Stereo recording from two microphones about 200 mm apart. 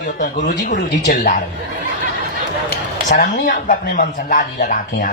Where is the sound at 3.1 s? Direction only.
40° left (ahead or behind).